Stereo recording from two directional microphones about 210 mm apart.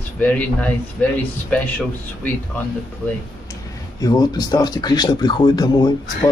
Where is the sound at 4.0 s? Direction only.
20° left (ahead or behind).